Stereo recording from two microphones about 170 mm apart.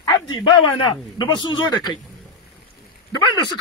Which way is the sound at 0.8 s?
25° left (ahead or behind).